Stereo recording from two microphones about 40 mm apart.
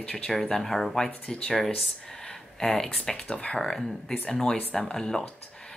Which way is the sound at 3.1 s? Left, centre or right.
Left.